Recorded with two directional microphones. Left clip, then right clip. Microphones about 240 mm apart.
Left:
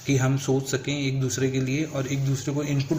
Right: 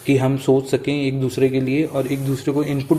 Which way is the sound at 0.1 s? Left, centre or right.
Right.